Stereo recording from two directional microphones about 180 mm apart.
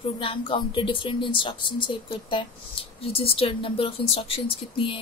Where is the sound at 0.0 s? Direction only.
30° left (ahead or behind).